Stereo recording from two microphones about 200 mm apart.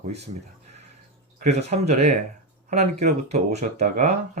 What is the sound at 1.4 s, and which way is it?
Speech, 35° right (ahead or behind).